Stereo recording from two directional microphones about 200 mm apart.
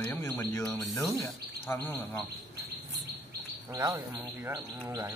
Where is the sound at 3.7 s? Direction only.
20° right (ahead or behind).